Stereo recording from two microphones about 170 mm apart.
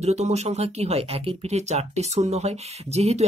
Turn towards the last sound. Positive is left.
turn(degrees=-40)  # may be behind; listen again after turning